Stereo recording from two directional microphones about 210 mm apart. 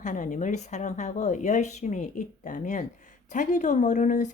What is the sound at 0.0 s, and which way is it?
Speech, 35° left (ahead or behind).